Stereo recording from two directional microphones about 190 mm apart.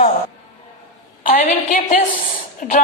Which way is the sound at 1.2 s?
45° left (ahead or behind).